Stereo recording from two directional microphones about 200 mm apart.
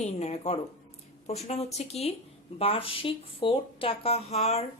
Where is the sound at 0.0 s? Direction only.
35° left (ahead or behind).